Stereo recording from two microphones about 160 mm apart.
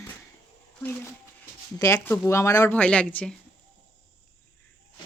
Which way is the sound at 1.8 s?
20° left (ahead or behind).